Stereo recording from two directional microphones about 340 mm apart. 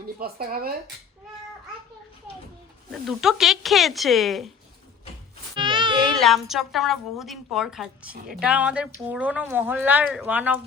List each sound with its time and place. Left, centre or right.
0.2 s speech: right
2.9 s a woman's voice: centre
5.5 s a sound: centre
6.1 s a woman's voice: centre